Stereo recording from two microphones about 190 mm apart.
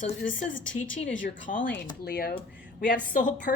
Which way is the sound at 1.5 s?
45° left (ahead or behind).